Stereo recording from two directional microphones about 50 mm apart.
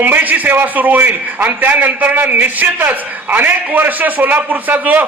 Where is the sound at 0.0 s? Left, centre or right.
Right.